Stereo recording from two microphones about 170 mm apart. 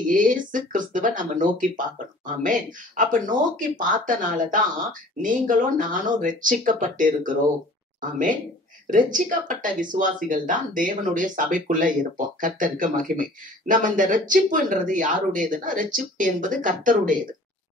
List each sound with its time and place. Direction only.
0.1 s speech: 50° right (ahead or behind)
8.9 s speech: 50° right (ahead or behind)